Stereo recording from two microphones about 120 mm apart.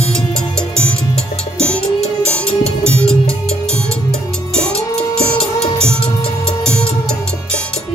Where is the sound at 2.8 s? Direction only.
10° left (ahead or behind).